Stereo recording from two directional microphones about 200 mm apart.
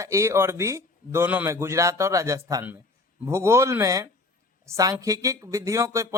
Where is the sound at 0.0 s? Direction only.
15° right (ahead or behind).